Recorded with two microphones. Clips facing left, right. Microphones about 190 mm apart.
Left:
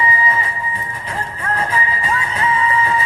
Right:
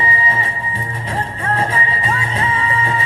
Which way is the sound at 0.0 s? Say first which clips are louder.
Left 2 dB; 30° right (ahead or behind).